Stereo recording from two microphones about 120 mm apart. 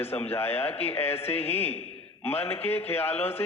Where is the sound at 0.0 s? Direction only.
20° left (ahead or behind).